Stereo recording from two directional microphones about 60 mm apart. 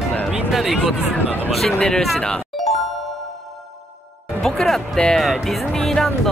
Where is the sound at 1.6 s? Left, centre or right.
Centre.